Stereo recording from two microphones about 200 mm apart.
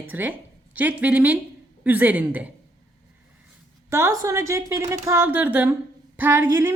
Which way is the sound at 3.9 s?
15° right (ahead or behind).